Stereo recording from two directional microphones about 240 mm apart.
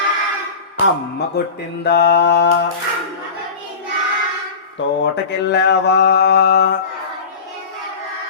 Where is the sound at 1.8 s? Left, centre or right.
Left.